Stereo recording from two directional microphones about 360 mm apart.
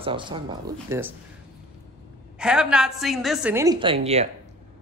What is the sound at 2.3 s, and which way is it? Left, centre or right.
A woman's voice, centre.